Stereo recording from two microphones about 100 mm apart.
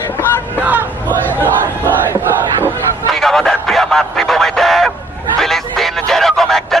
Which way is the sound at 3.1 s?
5° left (ahead or behind).